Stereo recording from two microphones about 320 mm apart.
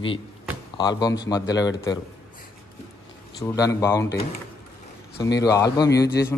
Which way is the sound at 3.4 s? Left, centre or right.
Centre.